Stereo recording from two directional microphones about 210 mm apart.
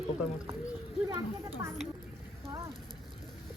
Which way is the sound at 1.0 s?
15° right (ahead or behind).